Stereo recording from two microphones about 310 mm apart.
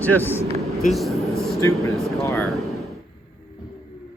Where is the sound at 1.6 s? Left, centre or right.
Centre.